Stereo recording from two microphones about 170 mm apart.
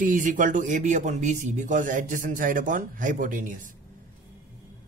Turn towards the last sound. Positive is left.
turn(degrees=-50)  # may be behind; listen again after turning